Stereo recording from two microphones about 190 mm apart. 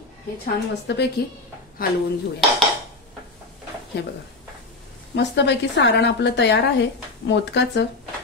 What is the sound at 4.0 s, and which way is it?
Speech, 60° left (ahead or behind).